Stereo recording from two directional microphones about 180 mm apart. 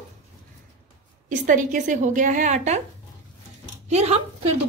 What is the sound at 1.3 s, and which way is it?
A woman's voice, 45° right (ahead or behind).